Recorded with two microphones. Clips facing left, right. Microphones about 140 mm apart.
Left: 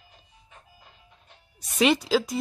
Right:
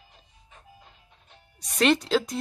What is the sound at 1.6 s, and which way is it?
Speech, 5° left (ahead or behind).